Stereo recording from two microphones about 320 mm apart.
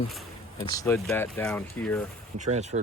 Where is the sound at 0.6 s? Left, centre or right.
Centre.